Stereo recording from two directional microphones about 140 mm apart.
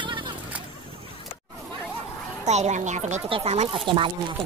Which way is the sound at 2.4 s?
55° right (ahead or behind).